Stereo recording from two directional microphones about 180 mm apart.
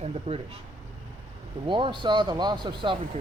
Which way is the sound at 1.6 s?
25° right (ahead or behind).